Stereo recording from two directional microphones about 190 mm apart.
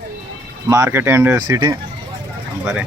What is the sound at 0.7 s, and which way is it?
Speech, 15° right (ahead or behind).